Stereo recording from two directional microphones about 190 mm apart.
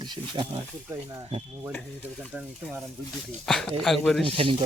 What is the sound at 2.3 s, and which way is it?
Speech, 5° right (ahead or behind).